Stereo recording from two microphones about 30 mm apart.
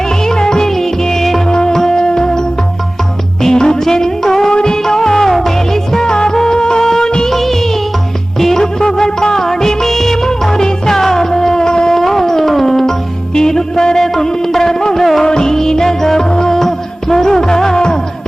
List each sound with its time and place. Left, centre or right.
0.3 s music: left
0.7 s music: centre
1.5 s music: left
6.1 s music: left
7.3 s music of bollywood: centre
8.4 s music: centre
11.0 s a sound: centre
11.9 s music: centre
15.3 s music: left